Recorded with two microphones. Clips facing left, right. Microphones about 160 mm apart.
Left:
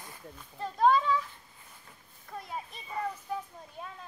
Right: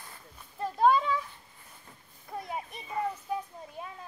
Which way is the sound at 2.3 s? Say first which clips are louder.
Right 3 dB; 15° right (ahead or behind).